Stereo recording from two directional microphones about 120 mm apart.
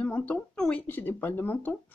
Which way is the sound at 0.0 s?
10° left (ahead or behind).